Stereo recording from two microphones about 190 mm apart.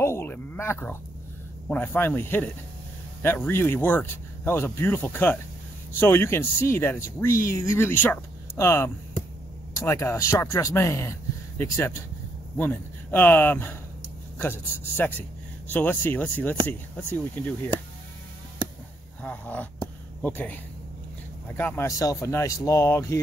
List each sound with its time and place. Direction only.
0.0 s a sound: 10° left (ahead or behind)
1.7 s speech: 10° left (ahead or behind)
19.2 s speech: 10° left (ahead or behind)